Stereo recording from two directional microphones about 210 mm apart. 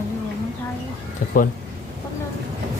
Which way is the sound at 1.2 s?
40° left (ahead or behind).